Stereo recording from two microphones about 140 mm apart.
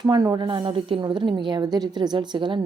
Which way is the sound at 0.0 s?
30° right (ahead or behind).